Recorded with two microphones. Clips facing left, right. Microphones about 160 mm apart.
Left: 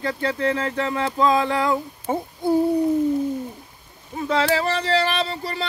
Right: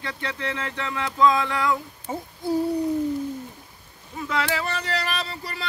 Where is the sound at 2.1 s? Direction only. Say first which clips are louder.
Left 7 dB; 60° left (ahead or behind).